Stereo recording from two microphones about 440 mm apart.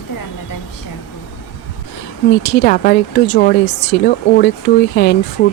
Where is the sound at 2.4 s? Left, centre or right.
Left.